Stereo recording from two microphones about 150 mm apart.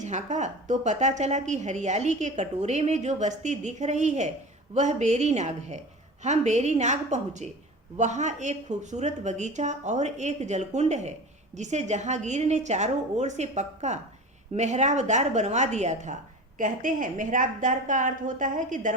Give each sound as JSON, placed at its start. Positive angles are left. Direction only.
{"t": 0.0, "sound": "a woman's voice", "side_deg": -50}